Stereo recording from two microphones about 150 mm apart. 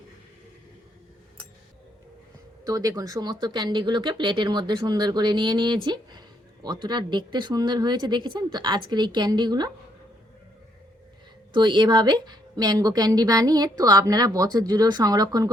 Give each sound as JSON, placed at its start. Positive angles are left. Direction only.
{"t": 2.6, "sound": "speech", "side_deg": -25}
{"t": 11.5, "sound": "speech", "side_deg": -30}